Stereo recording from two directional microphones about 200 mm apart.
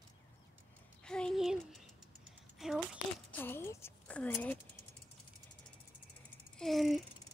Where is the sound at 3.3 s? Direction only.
10° left (ahead or behind).